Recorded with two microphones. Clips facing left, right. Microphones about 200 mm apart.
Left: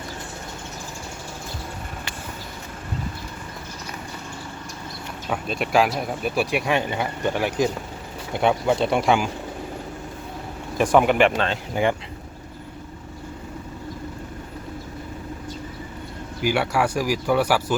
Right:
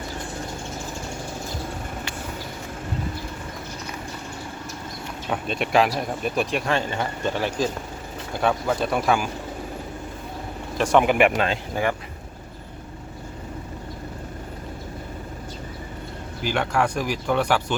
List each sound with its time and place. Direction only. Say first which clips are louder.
5.3 s speech: even; centre (ahead or behind); by 9.3 s 20° left (ahead or behind)
10.8 s speech: left 1 dB; centre (ahead or behind)
11.7 s speech: left 3 dB; 20° left (ahead or behind)
16.4 s speech: left 2 dB; 10° left (ahead or behind)